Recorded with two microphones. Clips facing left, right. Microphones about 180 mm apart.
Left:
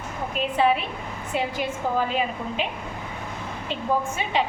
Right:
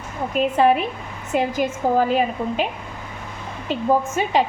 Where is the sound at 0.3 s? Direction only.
45° right (ahead or behind).